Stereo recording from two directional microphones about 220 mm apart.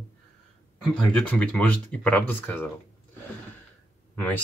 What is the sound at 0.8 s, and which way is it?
Speech, centre (ahead or behind).